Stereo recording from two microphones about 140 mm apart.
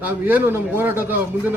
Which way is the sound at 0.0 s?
15° right (ahead or behind).